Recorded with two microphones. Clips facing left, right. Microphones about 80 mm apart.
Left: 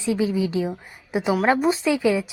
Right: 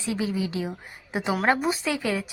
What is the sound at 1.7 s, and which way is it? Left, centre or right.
Speech, left.